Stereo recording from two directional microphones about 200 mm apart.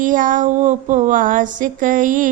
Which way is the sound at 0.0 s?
40° right (ahead or behind).